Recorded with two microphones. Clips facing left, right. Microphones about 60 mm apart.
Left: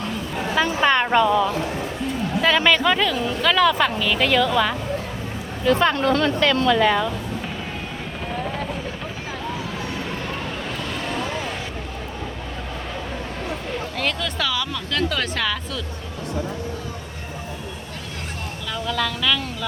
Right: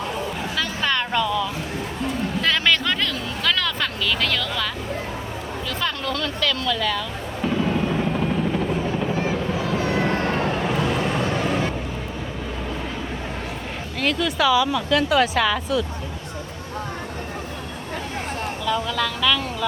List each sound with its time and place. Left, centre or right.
0.5 s a woman's voice: left
2.4 s speech: centre
5.6 s speech: left
9.8 s vehicle: right
14.0 s speech: centre
18.7 s speech: centre